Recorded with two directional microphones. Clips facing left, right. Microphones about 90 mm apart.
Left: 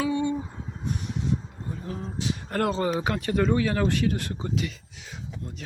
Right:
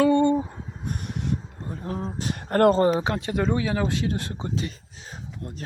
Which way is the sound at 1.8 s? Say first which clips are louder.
Right 3 dB; 40° right (ahead or behind).